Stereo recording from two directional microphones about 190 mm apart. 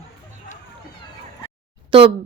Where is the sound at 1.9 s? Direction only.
30° right (ahead or behind).